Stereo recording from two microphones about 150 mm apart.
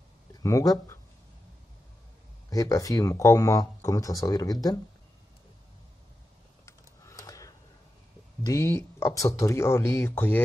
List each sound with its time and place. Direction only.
0.3 s speech: 20° left (ahead or behind)
2.5 s speech: 20° left (ahead or behind)
6.6 s typing: 20° left (ahead or behind)
8.5 s speech: 20° left (ahead or behind)